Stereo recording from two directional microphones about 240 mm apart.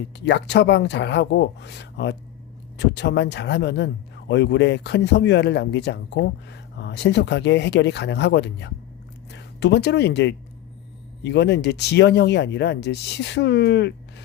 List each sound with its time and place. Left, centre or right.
0.3 s speech: left